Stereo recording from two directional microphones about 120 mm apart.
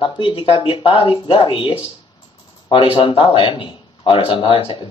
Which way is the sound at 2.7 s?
50° left (ahead or behind).